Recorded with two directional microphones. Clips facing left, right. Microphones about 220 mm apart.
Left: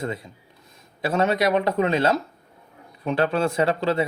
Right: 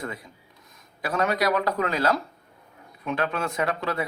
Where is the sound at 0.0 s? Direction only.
25° left (ahead or behind).